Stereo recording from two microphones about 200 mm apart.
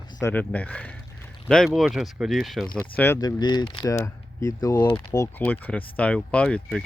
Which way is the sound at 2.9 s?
10° left (ahead or behind).